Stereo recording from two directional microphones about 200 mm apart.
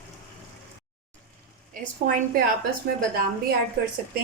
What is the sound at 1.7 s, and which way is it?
Speech, 45° right (ahead or behind).